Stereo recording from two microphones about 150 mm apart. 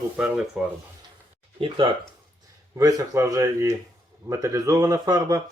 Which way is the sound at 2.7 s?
20° right (ahead or behind).